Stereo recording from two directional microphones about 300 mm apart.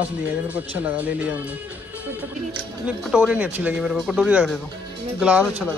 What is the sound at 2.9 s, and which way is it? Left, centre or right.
Speech, centre.